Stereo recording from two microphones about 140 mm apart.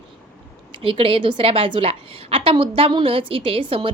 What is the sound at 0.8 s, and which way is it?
A woman's voice, 40° right (ahead or behind).